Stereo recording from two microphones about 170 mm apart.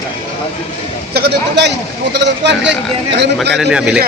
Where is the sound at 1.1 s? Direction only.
90° right.